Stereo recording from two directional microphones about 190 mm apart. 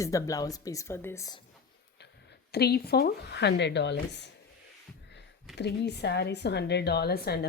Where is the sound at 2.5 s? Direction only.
60° left (ahead or behind).